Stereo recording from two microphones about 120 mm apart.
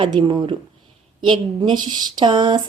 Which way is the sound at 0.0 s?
40° right (ahead or behind).